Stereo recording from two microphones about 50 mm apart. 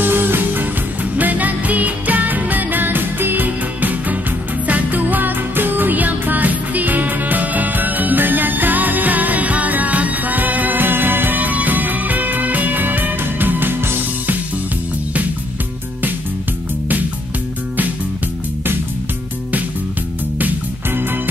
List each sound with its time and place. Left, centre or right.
0.0 s music: right
20.3 s music: right